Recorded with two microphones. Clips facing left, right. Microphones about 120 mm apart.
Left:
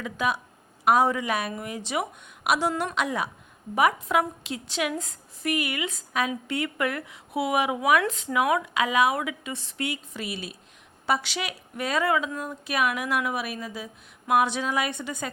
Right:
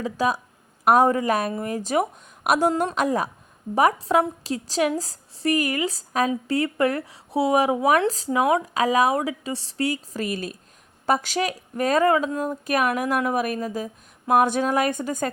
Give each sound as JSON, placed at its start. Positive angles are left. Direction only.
{"t": 0.0, "sound": "a woman's voice", "side_deg": -35}
{"t": 0.9, "sound": "a woman's voice", "side_deg": -45}